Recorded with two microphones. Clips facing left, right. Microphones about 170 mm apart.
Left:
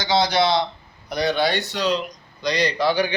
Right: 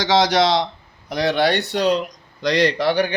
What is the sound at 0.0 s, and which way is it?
Speech, 90° right.